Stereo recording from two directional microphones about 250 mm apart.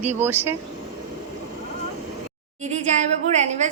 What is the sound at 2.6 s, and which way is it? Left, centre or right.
A woman's voice, right.